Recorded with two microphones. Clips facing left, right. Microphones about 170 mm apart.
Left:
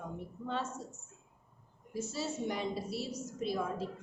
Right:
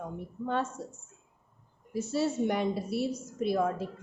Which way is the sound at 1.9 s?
60° right (ahead or behind).